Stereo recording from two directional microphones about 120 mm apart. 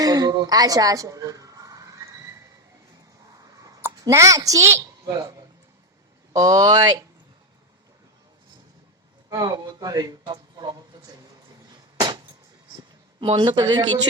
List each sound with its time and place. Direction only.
0.0 s a sound: 30° right (ahead or behind)
4.0 s a woman's voice: 25° right (ahead or behind)
6.3 s speech: 30° right (ahead or behind)
9.3 s speech: 30° right (ahead or behind)
11.7 s a sound: 40° right (ahead or behind)
13.1 s speech: 45° right (ahead or behind)